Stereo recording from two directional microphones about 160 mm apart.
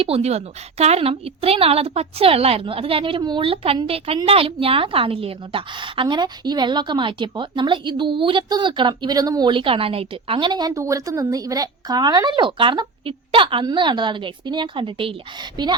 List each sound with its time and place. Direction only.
0.0 s a woman's voice: 40° right (ahead or behind)